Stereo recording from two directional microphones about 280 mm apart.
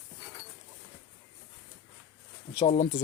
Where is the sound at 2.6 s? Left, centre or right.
Left.